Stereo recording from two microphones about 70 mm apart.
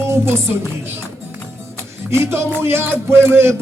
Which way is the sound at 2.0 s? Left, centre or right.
Right.